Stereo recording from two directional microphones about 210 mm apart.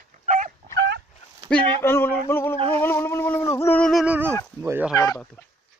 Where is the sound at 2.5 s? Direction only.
25° right (ahead or behind).